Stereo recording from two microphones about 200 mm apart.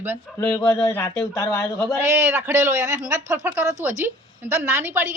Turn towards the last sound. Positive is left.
turn(degrees=-10)  # may be behind; listen again after turning